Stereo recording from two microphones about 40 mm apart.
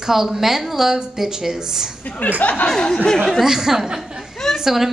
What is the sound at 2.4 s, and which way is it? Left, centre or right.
Speech, left.